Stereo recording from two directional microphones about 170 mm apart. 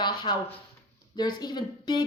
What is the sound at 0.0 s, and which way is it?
Speech, 25° left (ahead or behind).